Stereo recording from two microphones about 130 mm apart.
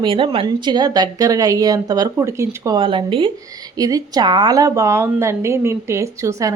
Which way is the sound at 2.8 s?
40° right (ahead or behind).